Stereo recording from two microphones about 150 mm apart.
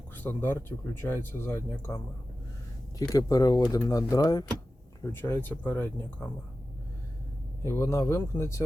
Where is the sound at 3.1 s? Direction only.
25° left (ahead or behind).